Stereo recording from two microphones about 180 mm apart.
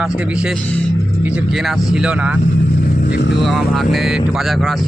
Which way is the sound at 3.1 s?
70° left (ahead or behind).